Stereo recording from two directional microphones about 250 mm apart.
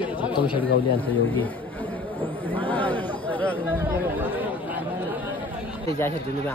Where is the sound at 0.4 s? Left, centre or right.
Left.